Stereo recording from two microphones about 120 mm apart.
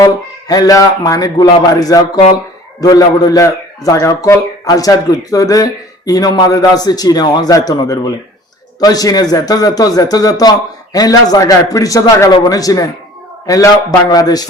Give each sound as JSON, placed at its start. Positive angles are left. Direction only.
{"t": 0.0, "sound": "a man's voice", "side_deg": 30}